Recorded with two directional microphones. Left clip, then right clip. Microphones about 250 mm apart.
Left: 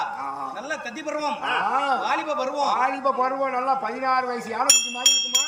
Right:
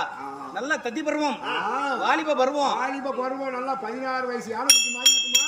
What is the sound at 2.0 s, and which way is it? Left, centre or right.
Speech, centre.